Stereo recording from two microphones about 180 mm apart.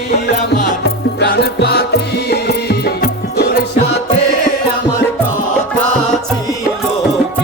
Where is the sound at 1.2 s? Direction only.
70° left (ahead or behind).